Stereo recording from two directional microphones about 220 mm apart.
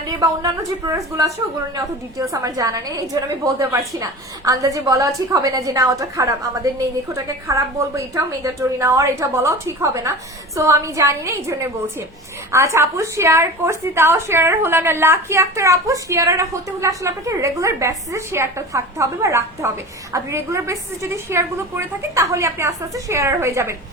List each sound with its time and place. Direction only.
0.9 s a woman's voice: 15° right (ahead or behind)